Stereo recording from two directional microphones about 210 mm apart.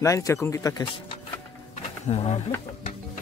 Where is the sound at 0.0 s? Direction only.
15° left (ahead or behind); by 2.4 s 30° left (ahead or behind).